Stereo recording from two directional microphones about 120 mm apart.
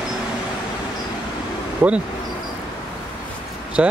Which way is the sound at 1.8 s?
10° right (ahead or behind).